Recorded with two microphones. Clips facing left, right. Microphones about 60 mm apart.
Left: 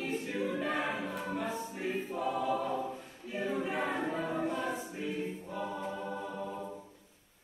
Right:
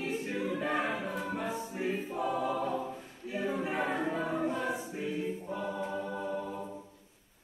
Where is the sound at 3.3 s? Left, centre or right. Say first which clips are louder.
Right 1 dB; centre.